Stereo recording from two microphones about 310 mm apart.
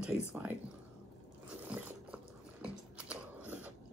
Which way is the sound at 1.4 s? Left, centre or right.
Centre.